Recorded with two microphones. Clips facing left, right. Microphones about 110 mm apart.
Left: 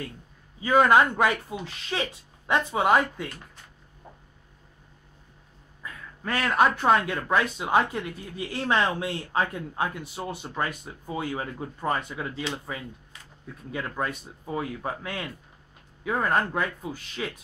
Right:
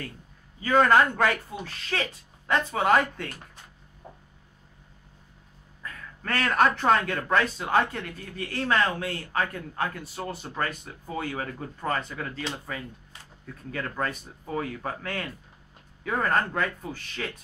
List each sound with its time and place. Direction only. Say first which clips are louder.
0.6 s speech: left 1 dB; 15° left (ahead or behind)
5.8 s a sound: even; 15° left (ahead or behind)
7.1 s speech: even; 10° left (ahead or behind)